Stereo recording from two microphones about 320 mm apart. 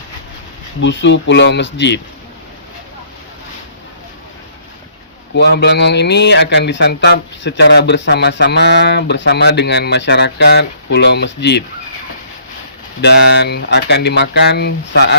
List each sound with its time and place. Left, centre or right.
0.8 s speech: left
5.3 s speech: left
13.0 s speech: left